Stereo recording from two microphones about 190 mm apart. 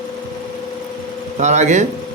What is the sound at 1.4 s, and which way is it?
Speech, 40° right (ahead or behind).